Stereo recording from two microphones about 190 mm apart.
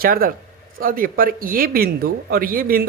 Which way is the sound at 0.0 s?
50° right (ahead or behind).